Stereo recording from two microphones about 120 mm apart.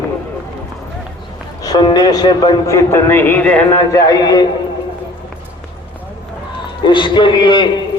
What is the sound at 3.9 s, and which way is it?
Speech, 30° left (ahead or behind).